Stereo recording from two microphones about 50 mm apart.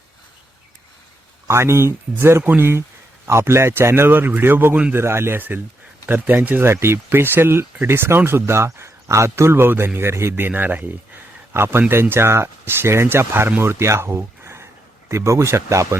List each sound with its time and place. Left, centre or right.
1.5 s speech: right
3.2 s speech: right
4.9 s speech: right
6.1 s speech: right
6.7 s speech: right
10.1 s speech: right
10.5 s speech: right
11.5 s speech: right
13.8 s a sound: right
15.1 s speech: right